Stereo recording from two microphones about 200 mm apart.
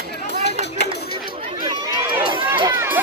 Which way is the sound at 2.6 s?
15° right (ahead or behind).